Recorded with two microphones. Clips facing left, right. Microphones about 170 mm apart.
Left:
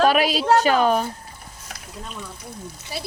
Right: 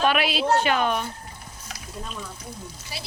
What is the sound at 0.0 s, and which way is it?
A woman's voice, 40° left (ahead or behind).